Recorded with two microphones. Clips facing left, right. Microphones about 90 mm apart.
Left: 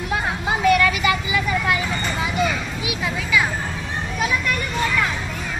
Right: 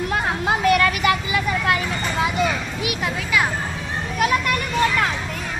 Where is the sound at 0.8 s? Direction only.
50° right (ahead or behind).